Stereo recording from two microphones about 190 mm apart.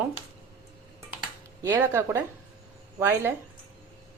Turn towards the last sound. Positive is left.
turn(degrees=-15)  # may be behind; listen again after turning